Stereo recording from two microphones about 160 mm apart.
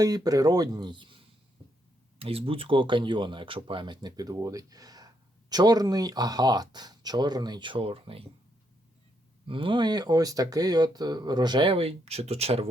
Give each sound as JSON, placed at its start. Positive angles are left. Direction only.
{"t": 0.0, "sound": "speech", "side_deg": -25}
{"t": 9.5, "sound": "speech", "side_deg": -30}